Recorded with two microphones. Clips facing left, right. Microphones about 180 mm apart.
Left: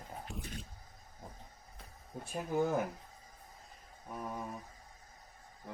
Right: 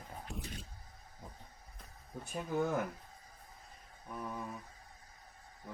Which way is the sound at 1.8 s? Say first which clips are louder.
Left 1 dB; centre (ahead or behind).